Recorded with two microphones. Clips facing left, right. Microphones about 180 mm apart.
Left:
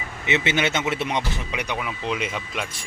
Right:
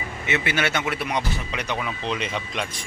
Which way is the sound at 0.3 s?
20° left (ahead or behind).